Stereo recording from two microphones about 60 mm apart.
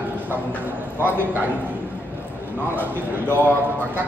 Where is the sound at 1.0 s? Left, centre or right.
Right.